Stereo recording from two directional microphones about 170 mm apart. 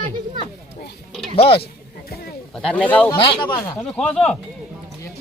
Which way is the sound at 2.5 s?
5° left (ahead or behind).